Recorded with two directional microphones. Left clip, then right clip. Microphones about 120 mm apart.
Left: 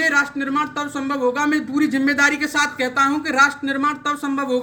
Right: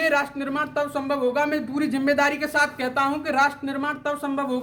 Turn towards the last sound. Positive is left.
turn(degrees=-20)  # may be behind; listen again after turning